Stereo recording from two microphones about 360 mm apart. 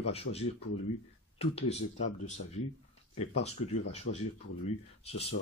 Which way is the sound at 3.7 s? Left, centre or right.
Centre.